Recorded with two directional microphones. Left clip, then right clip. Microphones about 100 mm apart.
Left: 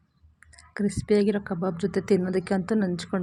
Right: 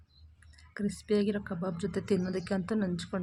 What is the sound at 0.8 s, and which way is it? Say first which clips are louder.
A woman's voice: left 7 dB; 30° left (ahead or behind).